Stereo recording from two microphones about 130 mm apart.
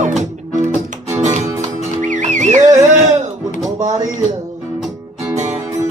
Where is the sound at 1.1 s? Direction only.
65° right (ahead or behind).